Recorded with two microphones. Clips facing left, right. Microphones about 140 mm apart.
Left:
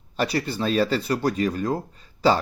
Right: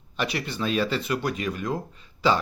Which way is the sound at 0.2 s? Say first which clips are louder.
Left 4 dB; 35° left (ahead or behind).